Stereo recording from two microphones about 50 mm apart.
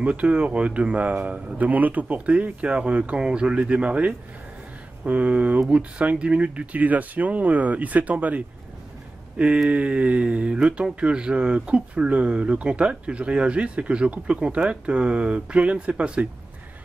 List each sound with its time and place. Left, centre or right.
0.0 s speech: right